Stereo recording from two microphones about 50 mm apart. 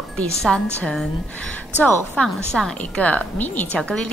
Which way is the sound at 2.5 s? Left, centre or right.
Centre.